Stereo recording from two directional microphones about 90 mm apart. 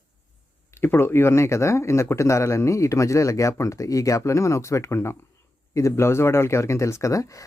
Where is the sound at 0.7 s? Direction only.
25° left (ahead or behind).